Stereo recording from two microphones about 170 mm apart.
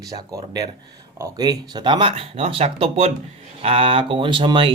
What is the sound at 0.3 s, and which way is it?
Speech, 20° right (ahead or behind).